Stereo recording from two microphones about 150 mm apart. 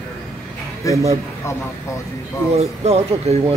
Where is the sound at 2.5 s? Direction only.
45° right (ahead or behind).